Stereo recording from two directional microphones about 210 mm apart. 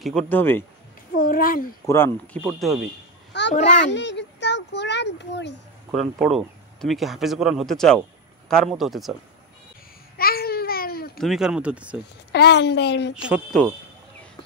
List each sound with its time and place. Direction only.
0.0 s speech: 5° left (ahead or behind)
1.1 s speech: 40° left (ahead or behind)
1.9 s speech: 10° left (ahead or behind)
3.3 s a sound: 55° left (ahead or behind)
3.8 s speech: 55° left (ahead or behind)
5.9 s speech: centre (ahead or behind)
10.1 s babbling: 45° left (ahead or behind)
11.1 s speech: centre (ahead or behind)
12.3 s speech: 55° left (ahead or behind)
13.1 s speech: 5° right (ahead or behind)